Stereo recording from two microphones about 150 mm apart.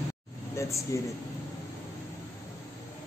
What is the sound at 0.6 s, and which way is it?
Speech, 20° left (ahead or behind).